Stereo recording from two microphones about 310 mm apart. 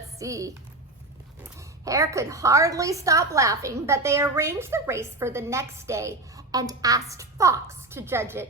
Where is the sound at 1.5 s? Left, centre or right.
Centre.